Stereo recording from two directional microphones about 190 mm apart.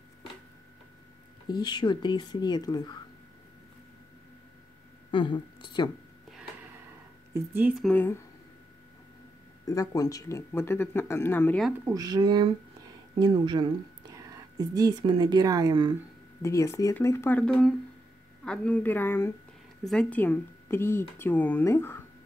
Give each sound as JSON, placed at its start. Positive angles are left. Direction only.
{"t": 1.5, "sound": "speech", "side_deg": 25}
{"t": 5.1, "sound": "speech", "side_deg": 25}
{"t": 7.8, "sound": "speech", "side_deg": 10}
{"t": 9.7, "sound": "speech", "side_deg": 20}
{"t": 11.8, "sound": "a woman's voice", "side_deg": -20}
{"t": 16.4, "sound": "speech", "side_deg": 15}